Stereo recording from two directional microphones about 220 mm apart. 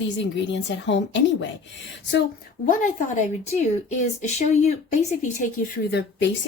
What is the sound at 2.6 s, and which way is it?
Speech, 35° left (ahead or behind).